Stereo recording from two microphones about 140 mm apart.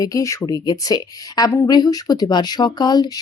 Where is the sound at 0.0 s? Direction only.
25° left (ahead or behind).